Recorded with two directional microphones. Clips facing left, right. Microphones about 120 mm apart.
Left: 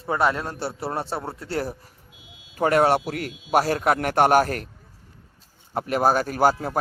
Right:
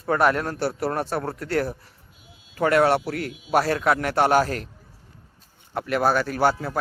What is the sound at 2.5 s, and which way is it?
A man's voice, 40° left (ahead or behind).